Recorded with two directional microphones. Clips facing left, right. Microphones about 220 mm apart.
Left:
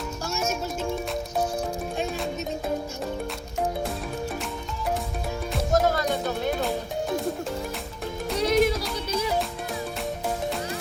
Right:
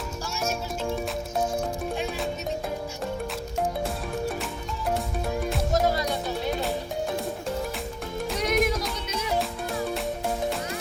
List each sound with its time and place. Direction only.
5.7 s music: 50° left (ahead or behind)
8.4 s yodeling: 30° left (ahead or behind)